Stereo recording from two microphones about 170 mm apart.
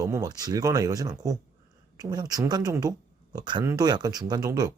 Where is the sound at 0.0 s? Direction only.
20° right (ahead or behind).